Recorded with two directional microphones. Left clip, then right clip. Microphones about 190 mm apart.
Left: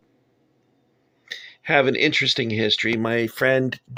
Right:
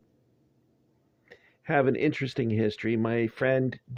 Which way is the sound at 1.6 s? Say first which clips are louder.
Left 6 dB; 15° left (ahead or behind).